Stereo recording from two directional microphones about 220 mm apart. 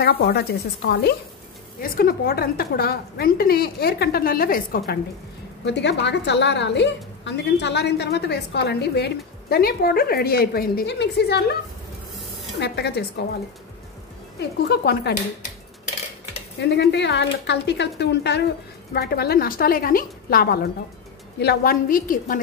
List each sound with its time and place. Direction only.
0.0 s a woman's voice: 45° left (ahead or behind)
5.7 s a woman's voice: 50° left (ahead or behind)
12.5 s a woman's voice: 50° left (ahead or behind)
14.7 s a woman's voice: 45° left (ahead or behind)
16.5 s a woman's voice: 50° left (ahead or behind)